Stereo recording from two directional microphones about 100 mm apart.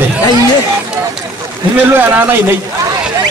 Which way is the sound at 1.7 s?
20° right (ahead or behind).